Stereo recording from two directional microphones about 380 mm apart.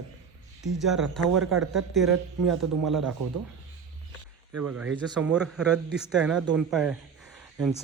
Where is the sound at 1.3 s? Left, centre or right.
Right.